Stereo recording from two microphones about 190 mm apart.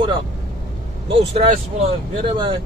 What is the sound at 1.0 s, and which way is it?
Speech, 30° right (ahead or behind).